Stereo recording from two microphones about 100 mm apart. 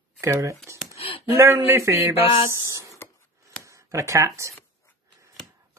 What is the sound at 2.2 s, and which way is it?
Speech, 60° left (ahead or behind).